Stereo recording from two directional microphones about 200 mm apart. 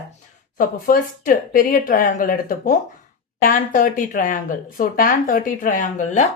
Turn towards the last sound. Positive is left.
turn(degrees=40)  # may be behind; listen again after turning